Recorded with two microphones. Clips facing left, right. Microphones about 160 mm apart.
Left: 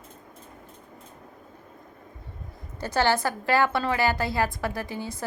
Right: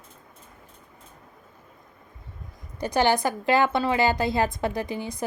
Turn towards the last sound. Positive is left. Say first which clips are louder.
# right 3 dB
turn(degrees=-15)  # may be behind; listen again after turning